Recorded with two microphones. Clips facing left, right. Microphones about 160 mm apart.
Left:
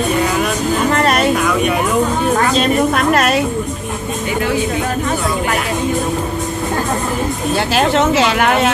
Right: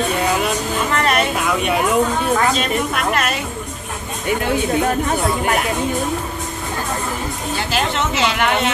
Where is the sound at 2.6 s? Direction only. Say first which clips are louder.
Left 6 dB; 40° left (ahead or behind).